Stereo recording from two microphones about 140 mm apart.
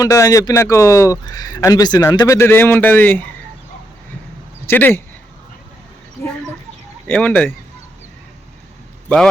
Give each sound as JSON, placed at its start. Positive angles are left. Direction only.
{"t": 0.0, "sound": "speech", "side_deg": 25}
{"t": 4.6, "sound": "speech", "side_deg": 15}
{"t": 7.1, "sound": "speech", "side_deg": 10}
{"t": 9.0, "sound": "speech", "side_deg": 5}